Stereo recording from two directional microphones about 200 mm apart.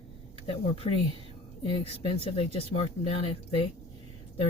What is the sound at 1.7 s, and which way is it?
Speech, 25° left (ahead or behind).